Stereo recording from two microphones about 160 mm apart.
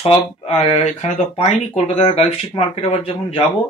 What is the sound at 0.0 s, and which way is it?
Speech, 35° left (ahead or behind).